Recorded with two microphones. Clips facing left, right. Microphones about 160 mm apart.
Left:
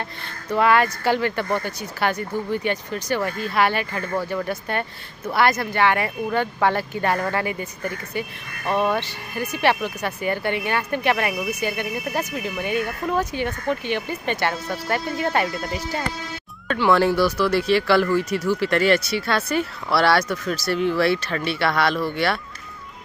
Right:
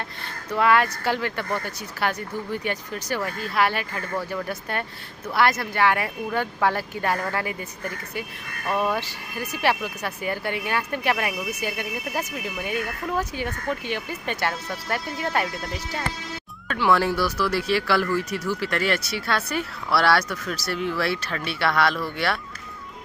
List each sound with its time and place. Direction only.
0.5 s speech: centre (ahead or behind)
8.6 s speech: 25° left (ahead or behind)
9.3 s speech: 5° right (ahead or behind)
16.6 s speech: 5° right (ahead or behind)